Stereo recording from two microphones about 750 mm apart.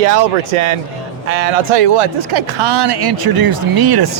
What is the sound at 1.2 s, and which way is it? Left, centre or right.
Speech, right.